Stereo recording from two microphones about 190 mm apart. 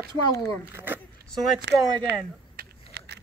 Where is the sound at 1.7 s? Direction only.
70° right (ahead or behind).